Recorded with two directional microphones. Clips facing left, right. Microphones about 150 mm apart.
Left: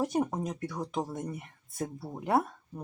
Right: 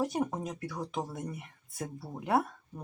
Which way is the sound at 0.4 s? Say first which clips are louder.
Left 2 dB; centre (ahead or behind).